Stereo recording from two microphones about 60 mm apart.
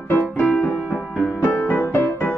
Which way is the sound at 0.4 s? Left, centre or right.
Left.